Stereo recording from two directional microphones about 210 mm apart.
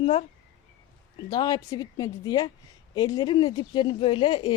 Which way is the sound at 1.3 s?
20° left (ahead or behind).